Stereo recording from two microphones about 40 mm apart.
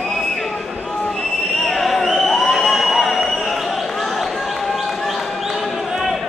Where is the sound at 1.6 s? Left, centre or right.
Centre.